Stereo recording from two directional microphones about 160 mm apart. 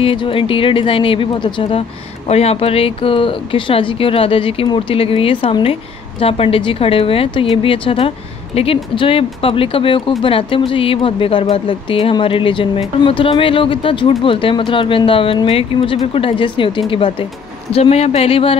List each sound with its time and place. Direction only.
0.0 s speech: 35° left (ahead or behind)